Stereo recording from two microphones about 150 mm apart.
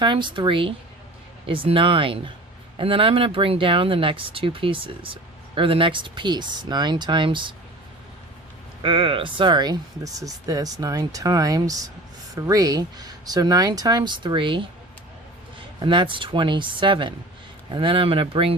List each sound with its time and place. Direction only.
0.0 s speech: 30° right (ahead or behind)
8.8 s speech: 35° right (ahead or behind)
15.8 s speech: 35° right (ahead or behind)